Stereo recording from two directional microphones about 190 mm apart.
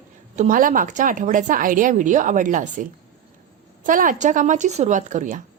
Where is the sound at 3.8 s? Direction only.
45° right (ahead or behind).